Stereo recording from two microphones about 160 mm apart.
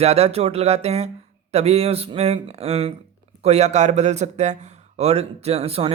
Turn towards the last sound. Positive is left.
turn(degrees=-40)  # may be behind; listen again after turning